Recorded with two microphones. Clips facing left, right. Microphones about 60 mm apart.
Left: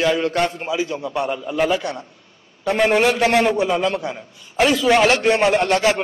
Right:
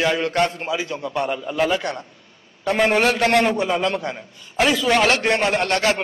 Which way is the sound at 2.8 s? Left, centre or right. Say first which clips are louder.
Left 2 dB; centre.